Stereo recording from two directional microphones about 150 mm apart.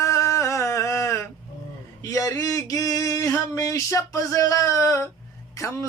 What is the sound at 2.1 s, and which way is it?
Male singing, 20° left (ahead or behind).